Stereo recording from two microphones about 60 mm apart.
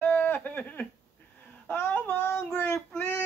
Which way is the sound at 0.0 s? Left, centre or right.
Left.